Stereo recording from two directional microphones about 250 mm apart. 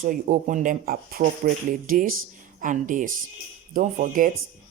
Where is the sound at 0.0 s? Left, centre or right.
Right.